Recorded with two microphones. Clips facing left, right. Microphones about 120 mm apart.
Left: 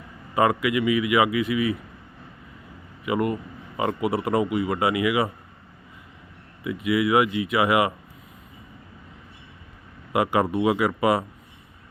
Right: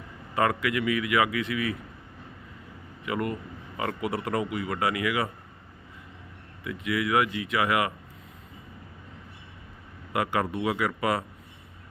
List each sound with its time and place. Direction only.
0.3 s a man's voice: 15° left (ahead or behind)
3.1 s a man's voice: 15° left (ahead or behind)
6.7 s a man's voice: 15° left (ahead or behind)
10.1 s speech: 25° left (ahead or behind)